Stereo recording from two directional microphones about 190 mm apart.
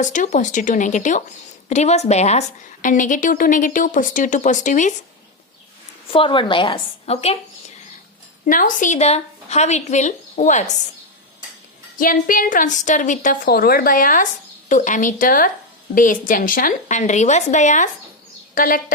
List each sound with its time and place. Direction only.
0.0 s a woman's voice: 40° left (ahead or behind)
6.1 s a woman's voice: 25° left (ahead or behind)
8.4 s speech: 45° left (ahead or behind)
11.9 s a woman's voice: 45° left (ahead or behind)